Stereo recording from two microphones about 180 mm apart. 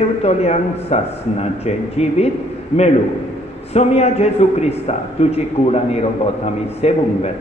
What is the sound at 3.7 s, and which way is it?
Speech, 35° left (ahead or behind).